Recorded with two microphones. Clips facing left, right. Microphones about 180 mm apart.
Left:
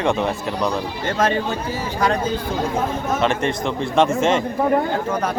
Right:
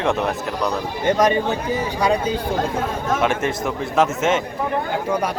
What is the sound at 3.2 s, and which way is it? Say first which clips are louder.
Speech: left 1 dB; 5° right (ahead or behind).